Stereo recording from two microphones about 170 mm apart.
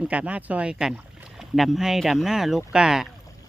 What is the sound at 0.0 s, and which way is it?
Speech, 10° right (ahead or behind).